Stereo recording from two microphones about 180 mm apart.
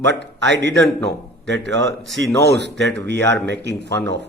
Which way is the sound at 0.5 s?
75° right (ahead or behind).